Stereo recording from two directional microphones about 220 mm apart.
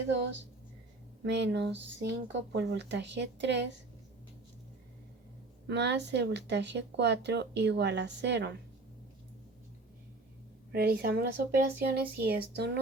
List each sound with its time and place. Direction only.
0.1 s speech: 55° right (ahead or behind)
5.6 s speech: 50° right (ahead or behind)
10.7 s speech: 45° right (ahead or behind)